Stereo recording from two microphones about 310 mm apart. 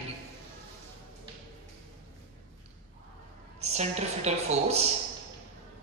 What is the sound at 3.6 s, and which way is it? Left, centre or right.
A woman's voice, right.